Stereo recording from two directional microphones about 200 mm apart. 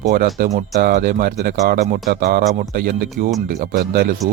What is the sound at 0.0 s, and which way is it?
Speech, 45° right (ahead or behind).